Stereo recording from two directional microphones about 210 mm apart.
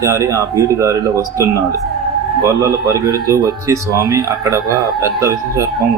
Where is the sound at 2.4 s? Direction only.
20° right (ahead or behind).